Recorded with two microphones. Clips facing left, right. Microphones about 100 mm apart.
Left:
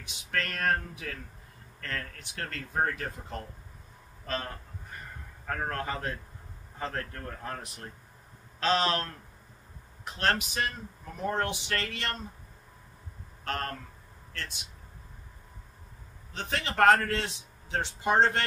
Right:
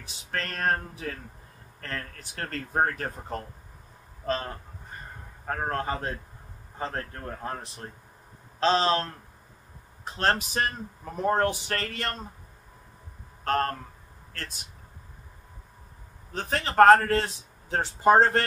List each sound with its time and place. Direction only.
0.0 s a man's voice: 35° right (ahead or behind)
5.4 s a man's voice: 30° right (ahead or behind)
13.4 s a sound: 40° right (ahead or behind)
14.3 s a man's voice: 40° right (ahead or behind)
16.3 s a man's voice: 40° right (ahead or behind)